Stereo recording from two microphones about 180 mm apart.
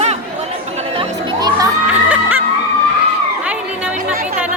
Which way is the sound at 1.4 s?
25° right (ahead or behind).